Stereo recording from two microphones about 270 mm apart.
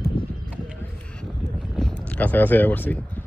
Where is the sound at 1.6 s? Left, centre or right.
Centre.